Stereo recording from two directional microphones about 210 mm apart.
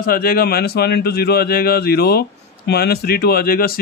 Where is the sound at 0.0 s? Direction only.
45° left (ahead or behind).